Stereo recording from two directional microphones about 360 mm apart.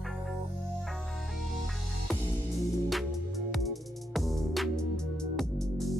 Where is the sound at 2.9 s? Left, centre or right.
Centre.